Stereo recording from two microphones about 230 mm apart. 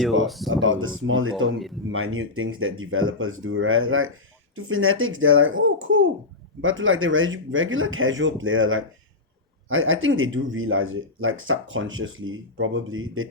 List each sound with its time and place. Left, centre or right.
0.3 s speech: centre
0.5 s speech: right